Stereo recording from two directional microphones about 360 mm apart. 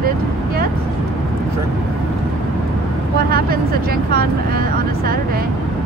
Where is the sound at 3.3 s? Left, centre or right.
Right.